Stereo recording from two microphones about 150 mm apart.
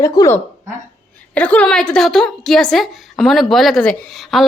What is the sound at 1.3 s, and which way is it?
A woman's voice, 10° left (ahead or behind).